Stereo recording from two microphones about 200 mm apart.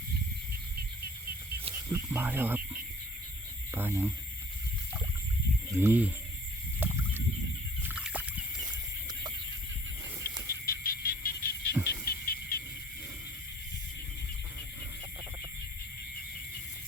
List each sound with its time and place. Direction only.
1.9 s speech: 10° right (ahead or behind)
3.8 s speech: 10° right (ahead or behind)
5.7 s speech: 10° right (ahead or behind)
6.7 s a sound: 10° right (ahead or behind)
7.9 s rowboat: 5° right (ahead or behind)
10.7 s frog: 45° left (ahead or behind)
11.7 s music: 15° right (ahead or behind)
12.0 s a sound: 50° left (ahead or behind)